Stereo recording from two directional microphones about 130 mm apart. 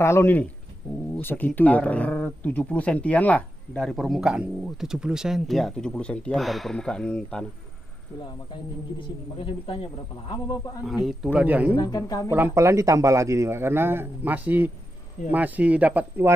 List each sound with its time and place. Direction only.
0.0 s speech: 20° left (ahead or behind)
9.0 s speech: 45° left (ahead or behind)
10.3 s speech: 30° left (ahead or behind)
10.9 s a man's voice: 5° right (ahead or behind)
11.7 s speech: 30° left (ahead or behind)
12.3 s a man's voice: 20° right (ahead or behind)